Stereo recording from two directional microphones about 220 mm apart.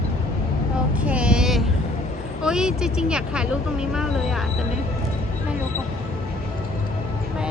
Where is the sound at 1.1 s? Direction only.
5° right (ahead or behind).